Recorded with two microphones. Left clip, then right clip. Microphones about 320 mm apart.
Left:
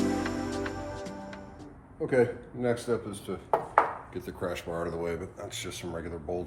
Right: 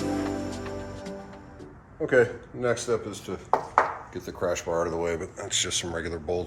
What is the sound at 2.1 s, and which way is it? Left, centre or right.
A man's voice, right.